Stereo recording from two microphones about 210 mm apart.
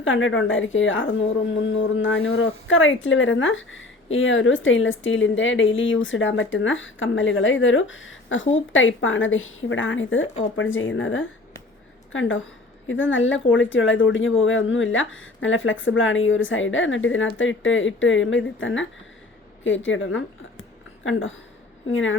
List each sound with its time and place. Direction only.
0.0 s a woman's voice: 65° left (ahead or behind)